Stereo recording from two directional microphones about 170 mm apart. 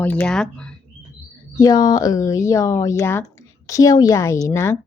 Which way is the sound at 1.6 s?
25° left (ahead or behind).